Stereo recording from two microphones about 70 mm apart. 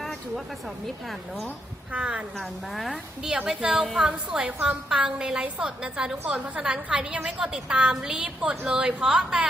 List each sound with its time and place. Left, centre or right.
0.0 s a sound: centre
1.0 s speech: centre
1.9 s a woman's voice: centre
2.4 s speech: centre
3.2 s a woman's voice: centre